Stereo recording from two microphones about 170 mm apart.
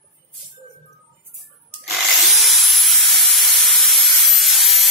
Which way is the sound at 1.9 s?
Centre (ahead or behind).